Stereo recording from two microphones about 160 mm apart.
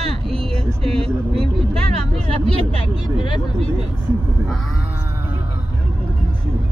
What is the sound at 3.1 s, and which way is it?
Speech, 30° left (ahead or behind).